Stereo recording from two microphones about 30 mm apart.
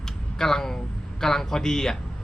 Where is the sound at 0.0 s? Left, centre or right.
Centre.